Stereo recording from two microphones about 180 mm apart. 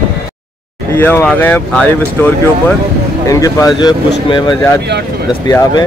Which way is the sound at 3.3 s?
20° left (ahead or behind).